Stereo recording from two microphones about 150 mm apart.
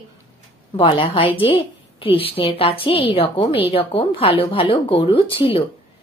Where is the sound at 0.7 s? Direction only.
35° left (ahead or behind).